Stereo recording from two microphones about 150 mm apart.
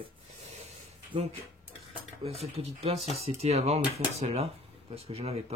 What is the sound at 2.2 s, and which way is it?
Speech, 40° right (ahead or behind).